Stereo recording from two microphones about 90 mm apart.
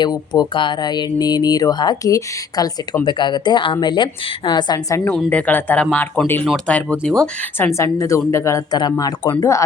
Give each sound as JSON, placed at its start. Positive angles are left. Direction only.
{"t": 0.0, "sound": "speech", "side_deg": 55}
{"t": 2.0, "sound": "a woman's voice", "side_deg": 40}
{"t": 3.0, "sound": "a woman's voice", "side_deg": 60}
{"t": 4.9, "sound": "a woman's voice", "side_deg": 35}
{"t": 5.3, "sound": "speech", "side_deg": 20}
{"t": 7.6, "sound": "a woman's voice", "side_deg": 35}
{"t": 8.7, "sound": "speech", "side_deg": 50}
{"t": 9.4, "sound": "a woman's voice", "side_deg": 35}